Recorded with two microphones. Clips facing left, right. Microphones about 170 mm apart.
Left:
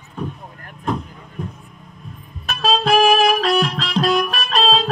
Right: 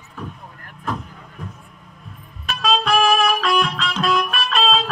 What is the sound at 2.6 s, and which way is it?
Music, 30° left (ahead or behind).